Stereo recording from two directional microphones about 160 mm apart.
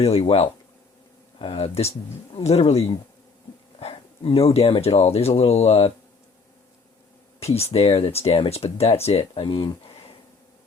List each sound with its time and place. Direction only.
0.0 s speech: 40° left (ahead or behind)
7.3 s speech: 40° left (ahead or behind)